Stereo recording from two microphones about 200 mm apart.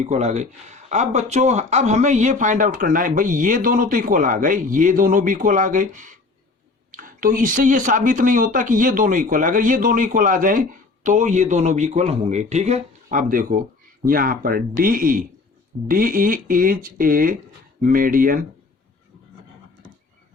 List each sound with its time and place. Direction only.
0.0 s speech: 35° right (ahead or behind)